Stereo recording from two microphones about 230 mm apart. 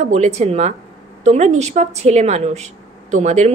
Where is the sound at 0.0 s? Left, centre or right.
Right.